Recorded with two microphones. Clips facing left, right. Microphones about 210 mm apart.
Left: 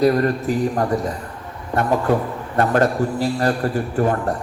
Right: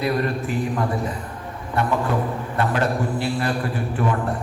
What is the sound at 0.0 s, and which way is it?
A man's voice, 40° left (ahead or behind).